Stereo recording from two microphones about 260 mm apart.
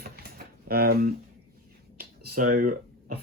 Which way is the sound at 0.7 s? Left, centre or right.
Right.